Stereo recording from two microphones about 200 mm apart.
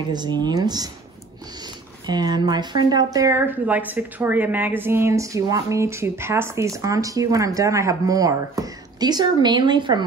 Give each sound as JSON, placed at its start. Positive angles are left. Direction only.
{"t": 0.1, "sound": "speech", "side_deg": -20}
{"t": 2.0, "sound": "speech", "side_deg": -20}